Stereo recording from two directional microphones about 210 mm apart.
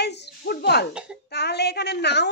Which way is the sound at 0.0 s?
55° left (ahead or behind).